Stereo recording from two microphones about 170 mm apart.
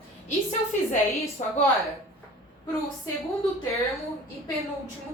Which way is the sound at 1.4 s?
45° left (ahead or behind).